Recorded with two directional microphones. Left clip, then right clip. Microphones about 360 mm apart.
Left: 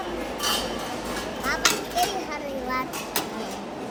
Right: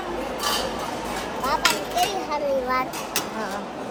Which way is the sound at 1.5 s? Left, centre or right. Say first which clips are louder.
Right 2 dB; centre.